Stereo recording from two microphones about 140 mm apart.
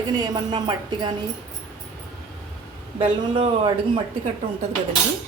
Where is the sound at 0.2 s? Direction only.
30° right (ahead or behind).